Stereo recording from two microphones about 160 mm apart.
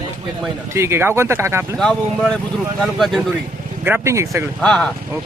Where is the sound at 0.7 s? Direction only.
15° right (ahead or behind).